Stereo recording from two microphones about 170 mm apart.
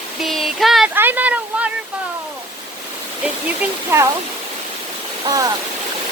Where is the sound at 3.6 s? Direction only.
15° right (ahead or behind).